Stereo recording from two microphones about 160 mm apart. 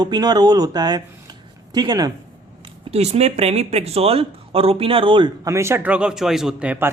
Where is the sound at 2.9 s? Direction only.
40° right (ahead or behind).